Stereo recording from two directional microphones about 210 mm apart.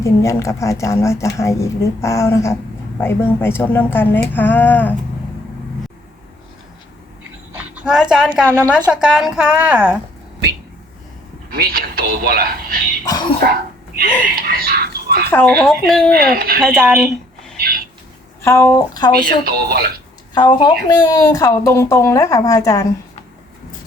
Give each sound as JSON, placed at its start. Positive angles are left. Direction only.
{"t": 0.0, "sound": "speech", "side_deg": 15}
{"t": 7.5, "sound": "a woman's voice", "side_deg": -5}
{"t": 11.5, "sound": "speech", "side_deg": -50}
{"t": 13.1, "sound": "speech", "side_deg": 20}
{"t": 13.4, "sound": "a sound", "side_deg": -45}
{"t": 14.4, "sound": "speech", "side_deg": -45}
{"t": 15.3, "sound": "a woman's voice", "side_deg": 5}
{"t": 16.3, "sound": "speech", "side_deg": -45}
{"t": 16.6, "sound": "speech", "side_deg": -5}
{"t": 18.4, "sound": "speech", "side_deg": 10}
{"t": 19.5, "sound": "speech", "side_deg": -45}
{"t": 20.3, "sound": "speech", "side_deg": 20}